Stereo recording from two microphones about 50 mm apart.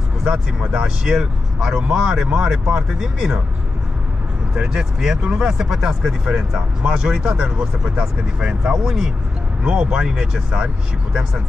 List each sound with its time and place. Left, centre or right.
0.2 s speech: centre
4.7 s speech: centre